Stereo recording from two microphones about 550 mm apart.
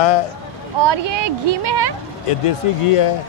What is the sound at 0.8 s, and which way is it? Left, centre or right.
Speech, right.